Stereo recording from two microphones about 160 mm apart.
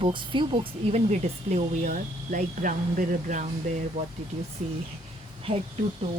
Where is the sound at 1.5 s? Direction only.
45° right (ahead or behind).